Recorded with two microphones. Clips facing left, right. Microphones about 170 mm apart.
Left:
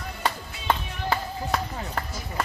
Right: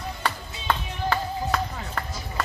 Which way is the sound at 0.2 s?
25° left (ahead or behind).